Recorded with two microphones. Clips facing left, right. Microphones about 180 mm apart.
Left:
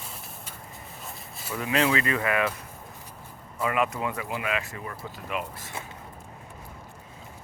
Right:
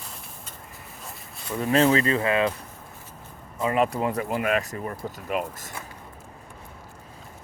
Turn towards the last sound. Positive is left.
turn(degrees=-45)  # may be behind; listen again after turning